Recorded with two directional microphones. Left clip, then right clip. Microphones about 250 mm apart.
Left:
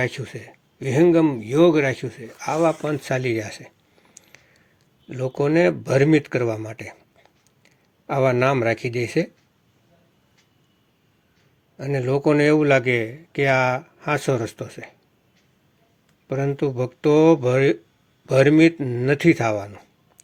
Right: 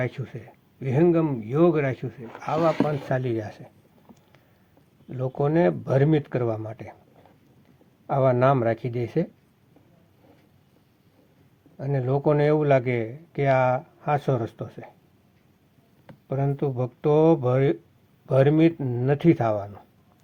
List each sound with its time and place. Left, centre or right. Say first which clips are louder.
0.0 s speech: left 5 dB; left
5.0 s speech: left 4 dB; left
8.0 s speech: left 1 dB; left
11.8 s speech: left 4 dB; left
16.3 s a man's voice: left 4 dB; left